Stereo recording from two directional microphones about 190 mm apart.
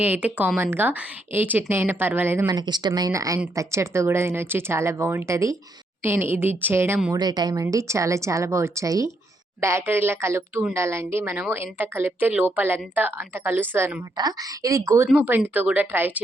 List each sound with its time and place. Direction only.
0.0 s speech: 10° right (ahead or behind)